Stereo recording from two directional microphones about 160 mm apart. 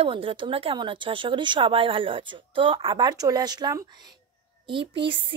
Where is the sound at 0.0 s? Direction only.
35° right (ahead or behind).